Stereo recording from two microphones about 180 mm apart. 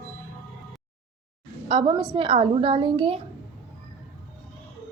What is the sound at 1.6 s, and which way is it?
A woman's voice, 30° right (ahead or behind).